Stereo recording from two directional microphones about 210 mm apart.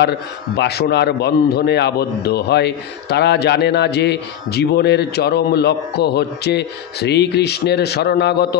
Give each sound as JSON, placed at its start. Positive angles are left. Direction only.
{"t": 0.6, "sound": "a man's voice", "side_deg": 50}